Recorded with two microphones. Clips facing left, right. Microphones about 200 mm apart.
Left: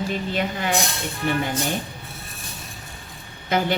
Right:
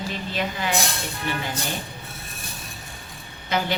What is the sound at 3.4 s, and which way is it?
Speech, 50° left (ahead or behind).